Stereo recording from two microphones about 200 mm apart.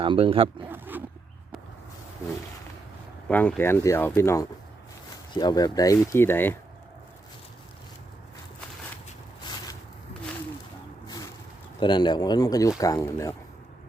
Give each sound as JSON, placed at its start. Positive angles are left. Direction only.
{"t": 0.0, "sound": "speech", "side_deg": -25}
{"t": 0.7, "sound": "zipper", "side_deg": -10}
{"t": 3.2, "sound": "speech", "side_deg": 10}
{"t": 11.0, "sound": "a sound", "side_deg": 20}
{"t": 11.8, "sound": "speech", "side_deg": 20}